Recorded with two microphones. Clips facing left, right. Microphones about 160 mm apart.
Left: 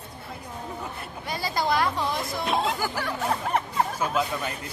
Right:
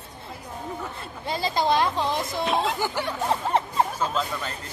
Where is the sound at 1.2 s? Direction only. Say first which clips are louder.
Right 3 dB; 25° right (ahead or behind).